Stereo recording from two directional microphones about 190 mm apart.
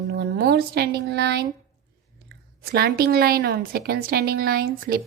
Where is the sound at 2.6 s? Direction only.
55° right (ahead or behind).